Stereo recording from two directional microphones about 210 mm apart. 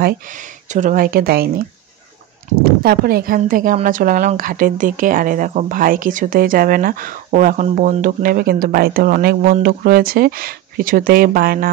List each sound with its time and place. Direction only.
0.7 s speech: 35° right (ahead or behind)
2.6 s speech: 45° right (ahead or behind)